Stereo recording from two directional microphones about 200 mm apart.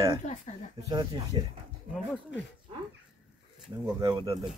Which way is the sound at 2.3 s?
65° left (ahead or behind).